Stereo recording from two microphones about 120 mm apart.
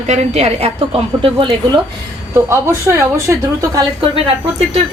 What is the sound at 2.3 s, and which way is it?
A woman's voice, 20° right (ahead or behind).